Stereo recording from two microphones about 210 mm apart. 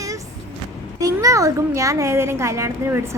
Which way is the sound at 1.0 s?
15° right (ahead or behind).